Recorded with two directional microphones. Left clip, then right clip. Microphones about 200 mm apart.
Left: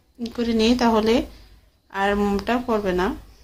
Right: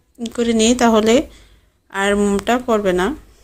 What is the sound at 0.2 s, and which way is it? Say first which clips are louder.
A woman's voice: right 5 dB; 20° right (ahead or behind).